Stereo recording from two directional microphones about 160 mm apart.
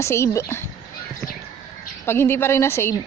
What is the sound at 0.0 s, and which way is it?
Speech, 15° left (ahead or behind).